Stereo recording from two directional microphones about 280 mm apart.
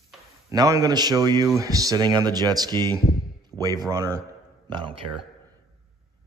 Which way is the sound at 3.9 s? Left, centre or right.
Centre.